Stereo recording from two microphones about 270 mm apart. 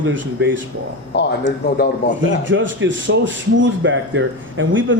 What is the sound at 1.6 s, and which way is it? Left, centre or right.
Speech, left.